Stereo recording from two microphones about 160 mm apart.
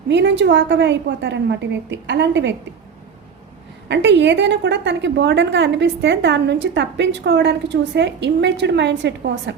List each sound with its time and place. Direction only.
0.1 s a woman's voice: 90° right
3.8 s a woman's voice: 90° right